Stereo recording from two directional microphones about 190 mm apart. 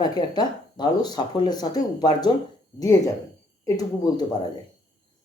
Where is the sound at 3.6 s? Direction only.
20° left (ahead or behind).